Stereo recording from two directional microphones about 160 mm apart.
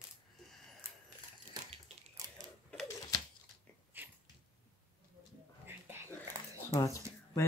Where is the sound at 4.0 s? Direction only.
10° right (ahead or behind).